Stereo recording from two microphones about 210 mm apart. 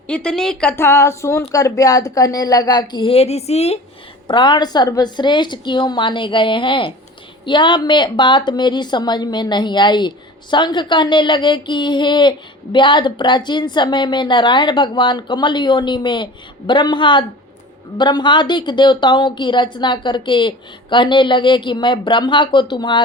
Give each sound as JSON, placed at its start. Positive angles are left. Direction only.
{"t": 0.1, "sound": "a woman's voice", "side_deg": 5}